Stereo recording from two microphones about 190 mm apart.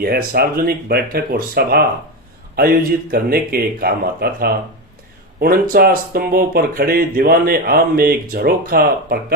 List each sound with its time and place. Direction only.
0.0 s speech: 55° right (ahead or behind)